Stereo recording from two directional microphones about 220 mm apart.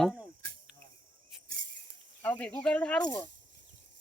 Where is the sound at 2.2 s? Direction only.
5° left (ahead or behind).